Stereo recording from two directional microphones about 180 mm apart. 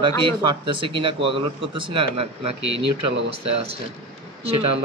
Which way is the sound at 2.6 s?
85° right.